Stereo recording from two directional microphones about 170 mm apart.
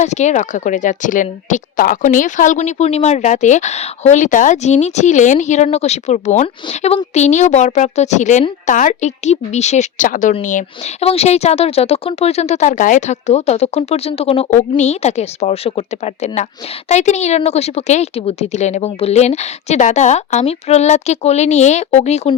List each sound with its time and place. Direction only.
0.0 s speech: 40° left (ahead or behind)
11.0 s speech: 35° left (ahead or behind)